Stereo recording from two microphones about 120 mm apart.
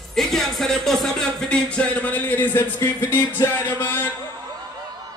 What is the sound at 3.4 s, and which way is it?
Speech, 15° left (ahead or behind).